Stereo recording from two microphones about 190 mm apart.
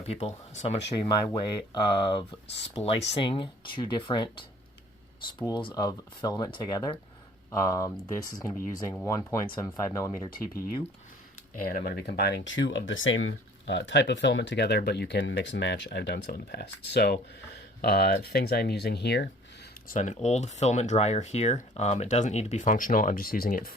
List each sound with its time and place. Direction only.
0.0 s speech: 35° left (ahead or behind)
1.0 s speech: 20° left (ahead or behind)
10.2 s speech: 50° left (ahead or behind)
11.7 s speech: 55° left (ahead or behind)
19.9 s speech: 40° left (ahead or behind)